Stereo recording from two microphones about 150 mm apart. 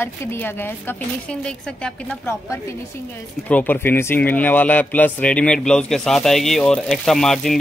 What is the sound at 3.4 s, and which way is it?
A man's voice, 10° left (ahead or behind).